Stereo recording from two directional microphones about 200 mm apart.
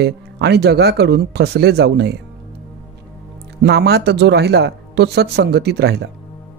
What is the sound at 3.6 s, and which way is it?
Speech, 55° right (ahead or behind).